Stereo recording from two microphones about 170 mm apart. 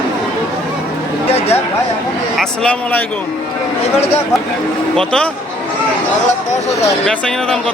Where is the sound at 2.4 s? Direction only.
5° left (ahead or behind).